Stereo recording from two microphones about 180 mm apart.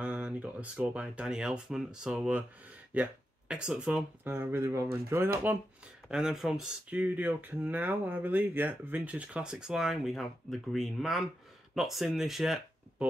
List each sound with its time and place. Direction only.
0.0 s speech: 5° right (ahead or behind)